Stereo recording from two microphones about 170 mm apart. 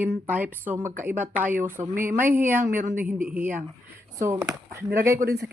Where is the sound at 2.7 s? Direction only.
50° right (ahead or behind).